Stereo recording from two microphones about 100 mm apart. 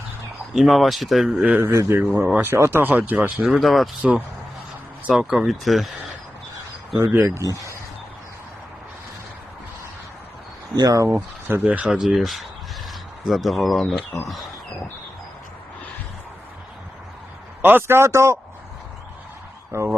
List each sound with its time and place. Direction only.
0.5 s speech: centre (ahead or behind)
1.6 s speech: 30° right (ahead or behind)
2.0 s speech: 20° right (ahead or behind); by 3.8 s centre (ahead or behind)
5.1 s speech: 5° right (ahead or behind)
7.0 s speech: 25° right (ahead or behind)
10.8 s speech: 35° right (ahead or behind)
11.4 s speech: 20° right (ahead or behind); by 13.9 s centre (ahead or behind)
17.6 s speech: 20° right (ahead or behind)
19.7 s speech: 25° right (ahead or behind)